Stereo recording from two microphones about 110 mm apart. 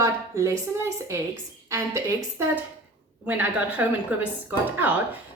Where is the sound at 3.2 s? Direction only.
15° right (ahead or behind).